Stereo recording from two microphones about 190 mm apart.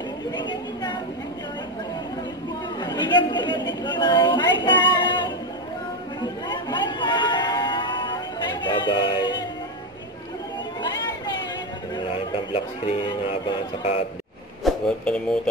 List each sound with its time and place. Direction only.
0.4 s chatter: 25° left (ahead or behind)
2.8 s chatter: 25° left (ahead or behind)
3.8 s a sound: 25° left (ahead or behind)
4.6 s child singing: 25° left (ahead or behind)
6.2 s a sound: 25° left (ahead or behind)
12.5 s speech: 30° left (ahead or behind)
14.6 s speech: 5° left (ahead or behind)